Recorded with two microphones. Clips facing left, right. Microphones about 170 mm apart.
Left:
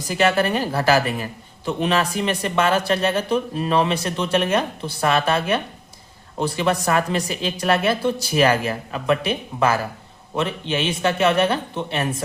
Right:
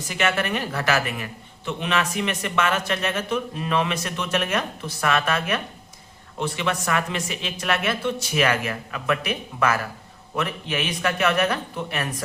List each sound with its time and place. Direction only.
0.1 s speech: 35° left (ahead or behind)